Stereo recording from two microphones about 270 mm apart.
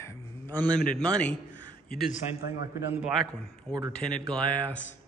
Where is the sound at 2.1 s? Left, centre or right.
Left.